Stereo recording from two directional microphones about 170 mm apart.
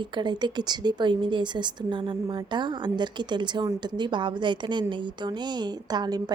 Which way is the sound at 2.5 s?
25° right (ahead or behind).